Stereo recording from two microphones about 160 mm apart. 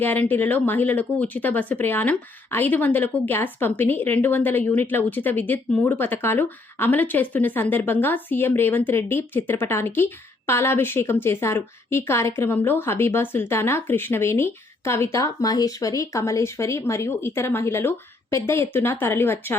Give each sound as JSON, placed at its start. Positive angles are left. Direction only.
{"t": 0.0, "sound": "speech", "side_deg": 10}